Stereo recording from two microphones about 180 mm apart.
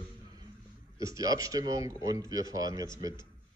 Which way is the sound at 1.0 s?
20° right (ahead or behind).